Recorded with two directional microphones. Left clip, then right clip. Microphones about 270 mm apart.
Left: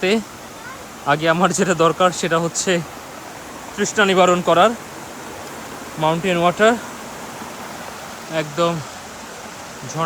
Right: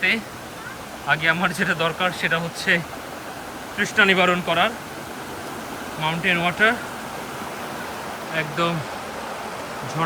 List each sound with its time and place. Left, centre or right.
1.0 s speech: centre
6.0 s speech: centre
8.4 s speech: centre